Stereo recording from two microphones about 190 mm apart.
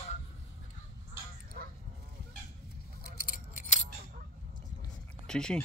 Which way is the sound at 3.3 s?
45° left (ahead or behind).